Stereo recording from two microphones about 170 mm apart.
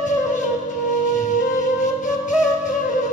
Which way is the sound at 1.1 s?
45° left (ahead or behind).